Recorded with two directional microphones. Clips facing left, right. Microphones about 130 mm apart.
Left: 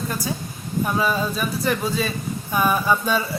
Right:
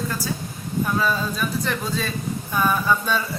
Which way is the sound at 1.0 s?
10° left (ahead or behind).